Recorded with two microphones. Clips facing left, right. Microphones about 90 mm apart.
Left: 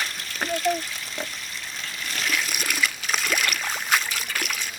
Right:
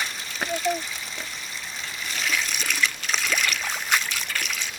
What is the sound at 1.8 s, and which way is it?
Water, centre (ahead or behind).